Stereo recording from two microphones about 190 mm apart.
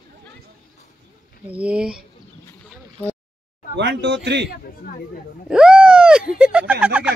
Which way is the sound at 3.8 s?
70° right (ahead or behind).